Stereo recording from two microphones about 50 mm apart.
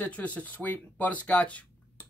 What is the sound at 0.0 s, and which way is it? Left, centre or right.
Speech, left.